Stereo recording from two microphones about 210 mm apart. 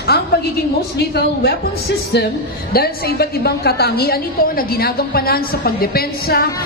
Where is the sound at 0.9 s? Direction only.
50° left (ahead or behind).